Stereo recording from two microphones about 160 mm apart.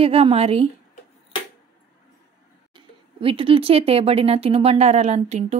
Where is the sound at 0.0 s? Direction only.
35° right (ahead or behind).